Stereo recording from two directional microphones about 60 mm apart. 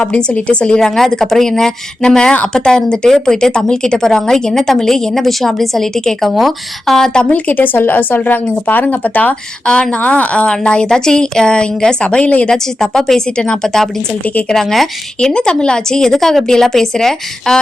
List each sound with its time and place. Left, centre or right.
0.0 s speech: centre
7.3 s speech: left
12.5 s speech: centre